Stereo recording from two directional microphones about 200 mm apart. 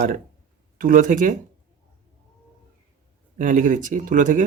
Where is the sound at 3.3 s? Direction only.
40° right (ahead or behind).